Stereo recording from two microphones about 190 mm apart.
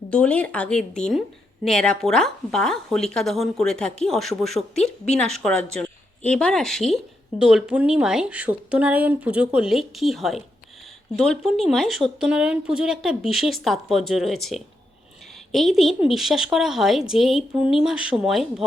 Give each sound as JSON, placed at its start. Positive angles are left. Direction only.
{"t": 0.1, "sound": "speech", "side_deg": 5}